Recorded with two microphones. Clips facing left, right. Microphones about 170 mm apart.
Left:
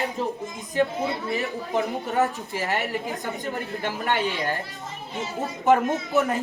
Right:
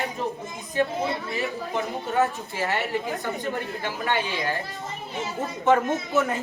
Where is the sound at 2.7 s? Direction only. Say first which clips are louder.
Even; 20° left (ahead or behind).